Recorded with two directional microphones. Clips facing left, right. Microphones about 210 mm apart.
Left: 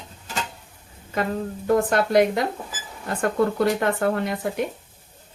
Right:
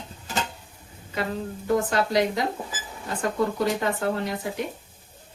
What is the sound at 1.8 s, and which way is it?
Speech, 55° left (ahead or behind).